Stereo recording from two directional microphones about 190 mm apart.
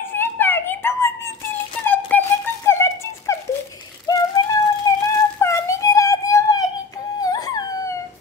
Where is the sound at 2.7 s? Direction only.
15° left (ahead or behind).